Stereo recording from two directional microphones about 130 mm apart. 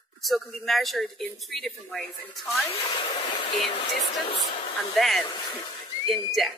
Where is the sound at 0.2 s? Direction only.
Centre (ahead or behind).